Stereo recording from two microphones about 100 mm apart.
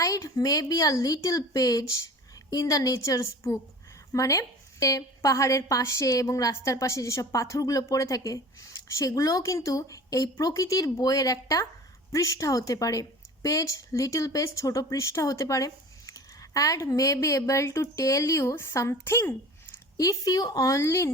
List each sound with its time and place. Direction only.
0.0 s a woman's voice: 35° left (ahead or behind)
20.0 s a woman's voice: 35° left (ahead or behind)